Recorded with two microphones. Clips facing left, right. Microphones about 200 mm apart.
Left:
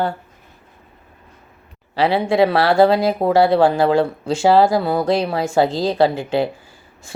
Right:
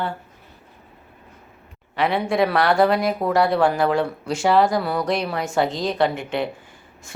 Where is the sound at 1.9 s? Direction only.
30° left (ahead or behind).